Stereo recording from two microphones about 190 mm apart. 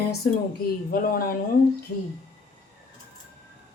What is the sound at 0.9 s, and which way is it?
Speech, 50° left (ahead or behind).